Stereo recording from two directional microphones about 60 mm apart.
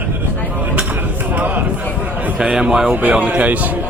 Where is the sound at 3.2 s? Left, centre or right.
Right.